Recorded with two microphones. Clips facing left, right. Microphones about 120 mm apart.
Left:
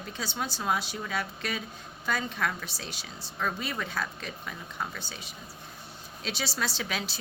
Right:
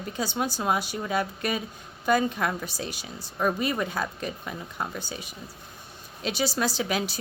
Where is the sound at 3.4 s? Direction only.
15° right (ahead or behind).